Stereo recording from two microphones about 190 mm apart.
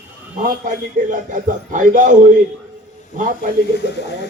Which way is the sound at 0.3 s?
45° right (ahead or behind).